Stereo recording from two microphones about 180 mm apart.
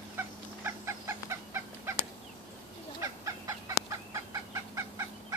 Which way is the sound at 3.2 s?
20° right (ahead or behind).